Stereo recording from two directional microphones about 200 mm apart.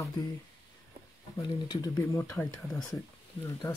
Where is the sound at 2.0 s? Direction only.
10° left (ahead or behind).